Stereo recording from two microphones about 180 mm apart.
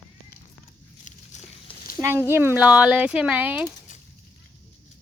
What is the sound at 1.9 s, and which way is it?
Speech, 15° right (ahead or behind).